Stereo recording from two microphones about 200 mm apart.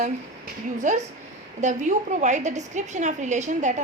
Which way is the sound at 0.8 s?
40° right (ahead or behind).